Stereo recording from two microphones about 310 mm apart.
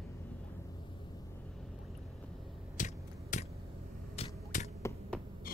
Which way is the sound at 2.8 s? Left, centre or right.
Left.